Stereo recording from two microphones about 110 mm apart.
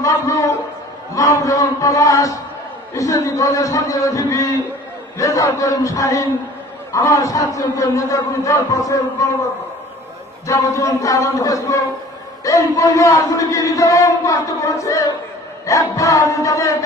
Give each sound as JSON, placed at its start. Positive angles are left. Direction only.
{"t": 0.0, "sound": "a man's voice", "side_deg": 30}
{"t": 10.4, "sound": "a man's voice", "side_deg": 30}